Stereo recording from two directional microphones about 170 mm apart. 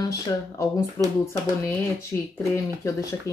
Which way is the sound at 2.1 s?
15° left (ahead or behind).